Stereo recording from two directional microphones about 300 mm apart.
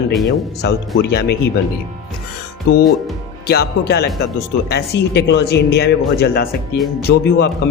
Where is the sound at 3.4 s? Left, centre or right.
Left.